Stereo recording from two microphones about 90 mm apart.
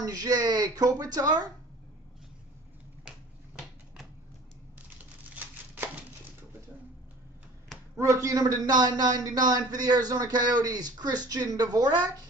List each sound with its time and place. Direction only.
0.0 s a man's voice: 45° right (ahead or behind)
8.0 s a man's voice: 35° right (ahead or behind)